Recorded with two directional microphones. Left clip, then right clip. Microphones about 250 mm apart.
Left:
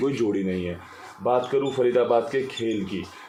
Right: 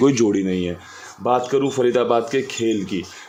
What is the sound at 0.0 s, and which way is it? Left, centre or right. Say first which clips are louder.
Speech: right 7 dB; right.